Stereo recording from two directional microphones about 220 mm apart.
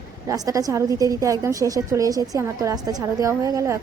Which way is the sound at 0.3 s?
15° right (ahead or behind).